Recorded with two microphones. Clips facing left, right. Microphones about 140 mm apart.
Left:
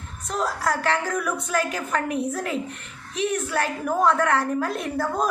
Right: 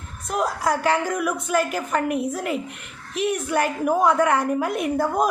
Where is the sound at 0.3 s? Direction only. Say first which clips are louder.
Right 2 dB; 15° right (ahead or behind).